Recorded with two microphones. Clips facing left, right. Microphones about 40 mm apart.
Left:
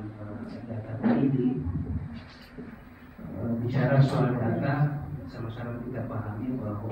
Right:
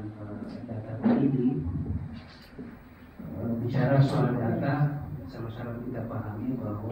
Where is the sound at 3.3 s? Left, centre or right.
Centre.